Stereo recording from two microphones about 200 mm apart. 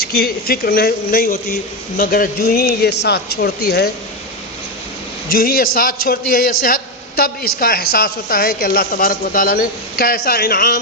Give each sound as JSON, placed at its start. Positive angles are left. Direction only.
{"t": 0.0, "sound": "speech", "side_deg": 50}
{"t": 5.3, "sound": "speech", "side_deg": 45}